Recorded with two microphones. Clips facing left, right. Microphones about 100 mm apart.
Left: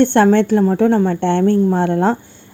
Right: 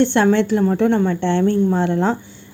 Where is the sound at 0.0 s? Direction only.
50° left (ahead or behind).